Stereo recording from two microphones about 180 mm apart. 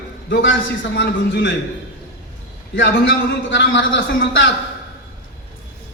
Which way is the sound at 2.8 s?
90° left.